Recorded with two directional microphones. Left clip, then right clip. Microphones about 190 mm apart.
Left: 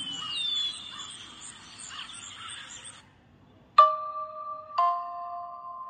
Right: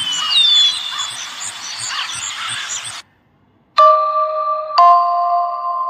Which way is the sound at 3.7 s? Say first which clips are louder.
Right 10 dB; 50° right (ahead or behind).